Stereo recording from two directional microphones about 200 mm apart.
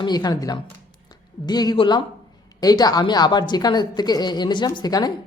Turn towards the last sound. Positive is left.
turn(degrees=20)  # may be behind; listen again after turning